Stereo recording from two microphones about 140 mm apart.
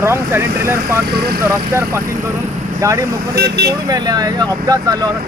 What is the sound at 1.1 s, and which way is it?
Speech, 90° right.